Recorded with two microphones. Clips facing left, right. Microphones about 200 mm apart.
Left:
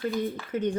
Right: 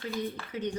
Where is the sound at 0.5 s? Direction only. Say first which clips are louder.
Left 7 dB; 50° left (ahead or behind).